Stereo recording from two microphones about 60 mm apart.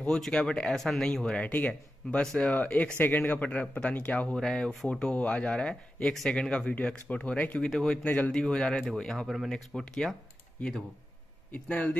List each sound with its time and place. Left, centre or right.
0.0 s speech: centre
1.4 s speech: left
4.4 s speech: centre
7.7 s speech: centre
8.0 s speech: centre
11.5 s speech: left